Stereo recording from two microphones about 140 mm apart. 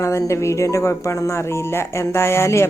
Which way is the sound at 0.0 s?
20° left (ahead or behind).